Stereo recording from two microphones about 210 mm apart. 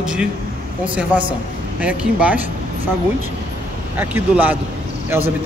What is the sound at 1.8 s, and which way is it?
Speech, 5° right (ahead or behind).